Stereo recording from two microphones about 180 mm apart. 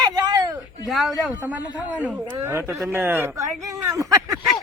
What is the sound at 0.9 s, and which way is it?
A man's voice, centre (ahead or behind).